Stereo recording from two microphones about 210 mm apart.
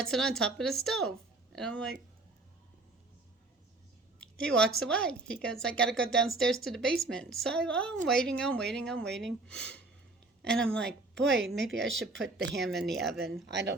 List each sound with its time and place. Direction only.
0.0 s a woman's voice: centre (ahead or behind)
4.2 s a sound: 5° left (ahead or behind)
4.8 s a woman's voice: 5° left (ahead or behind)
13.5 s speech: 55° right (ahead or behind)